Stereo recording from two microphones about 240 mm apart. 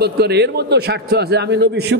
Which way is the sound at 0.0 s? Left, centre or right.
Right.